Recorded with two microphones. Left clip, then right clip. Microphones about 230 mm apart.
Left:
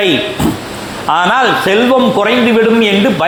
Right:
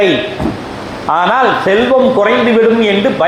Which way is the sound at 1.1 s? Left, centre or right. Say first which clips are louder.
Even; left.